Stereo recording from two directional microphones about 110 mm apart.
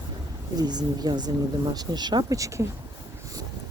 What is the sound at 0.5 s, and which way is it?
Speech, 40° right (ahead or behind).